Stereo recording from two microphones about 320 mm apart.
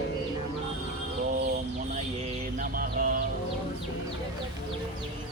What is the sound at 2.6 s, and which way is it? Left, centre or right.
Music, right.